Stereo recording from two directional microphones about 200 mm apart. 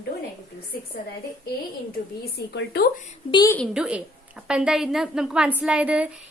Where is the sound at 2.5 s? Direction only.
55° left (ahead or behind).